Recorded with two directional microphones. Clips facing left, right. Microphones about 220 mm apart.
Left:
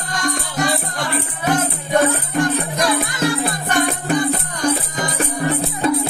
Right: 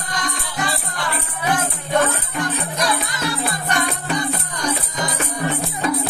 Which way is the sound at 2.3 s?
50° left (ahead or behind).